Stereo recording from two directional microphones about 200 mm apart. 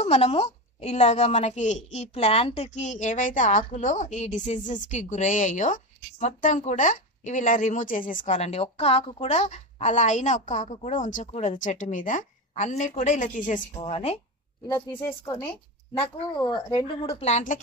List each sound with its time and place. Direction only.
0.0 s a woman's voice: 30° left (ahead or behind)
13.7 s a woman's voice: 30° left (ahead or behind)
14.9 s speech: 10° left (ahead or behind); by 17.6 s 35° left (ahead or behind)